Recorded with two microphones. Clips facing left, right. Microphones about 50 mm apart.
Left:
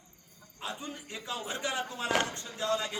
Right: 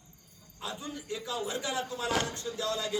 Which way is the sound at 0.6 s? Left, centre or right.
Left.